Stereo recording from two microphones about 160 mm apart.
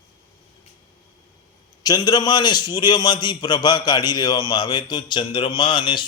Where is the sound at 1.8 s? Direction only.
25° left (ahead or behind).